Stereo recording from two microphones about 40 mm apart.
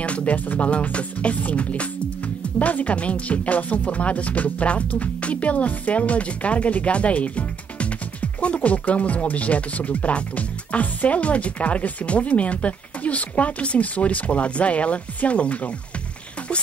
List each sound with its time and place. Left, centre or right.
0.0 s speech: left
8.5 s speech: left